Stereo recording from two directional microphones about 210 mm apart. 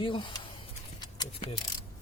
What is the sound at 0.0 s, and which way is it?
Speech, 25° left (ahead or behind).